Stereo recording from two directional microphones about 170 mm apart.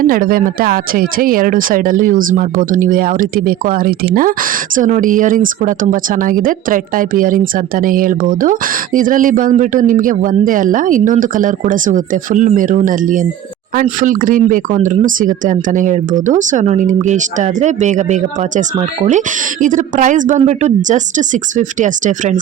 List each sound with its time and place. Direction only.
0.0 s speech: 55° right (ahead or behind)